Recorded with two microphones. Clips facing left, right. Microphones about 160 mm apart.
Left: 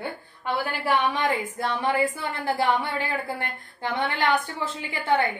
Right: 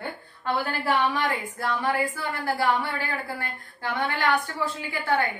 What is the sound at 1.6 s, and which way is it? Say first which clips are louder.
A woman's voice: left 1 dB; 20° left (ahead or behind).